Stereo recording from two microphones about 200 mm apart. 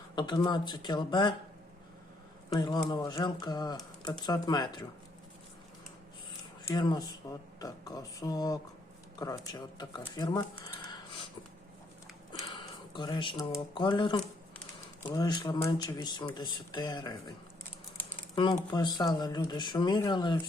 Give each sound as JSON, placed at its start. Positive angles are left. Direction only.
{"t": 0.2, "sound": "speech", "side_deg": 20}
{"t": 2.5, "sound": "speech", "side_deg": 20}
{"t": 6.7, "sound": "speech", "side_deg": 20}
{"t": 12.3, "sound": "a sound", "side_deg": 25}
{"t": 13.5, "sound": "speech", "side_deg": 25}
{"t": 18.7, "sound": "speech", "side_deg": 20}